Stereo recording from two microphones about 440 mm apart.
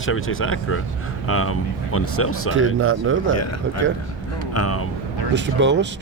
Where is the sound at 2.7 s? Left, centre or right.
Right.